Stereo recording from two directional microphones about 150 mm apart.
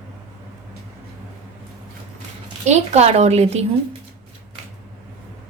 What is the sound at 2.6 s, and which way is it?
A woman's voice, 45° right (ahead or behind).